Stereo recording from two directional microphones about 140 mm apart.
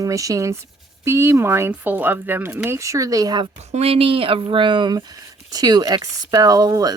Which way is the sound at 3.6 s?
50° right (ahead or behind).